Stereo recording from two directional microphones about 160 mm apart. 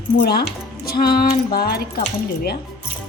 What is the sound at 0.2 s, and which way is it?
A woman's voice, 75° left (ahead or behind).